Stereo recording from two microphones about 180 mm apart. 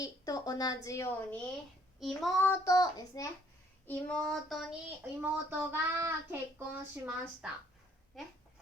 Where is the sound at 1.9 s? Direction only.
Centre (ahead or behind).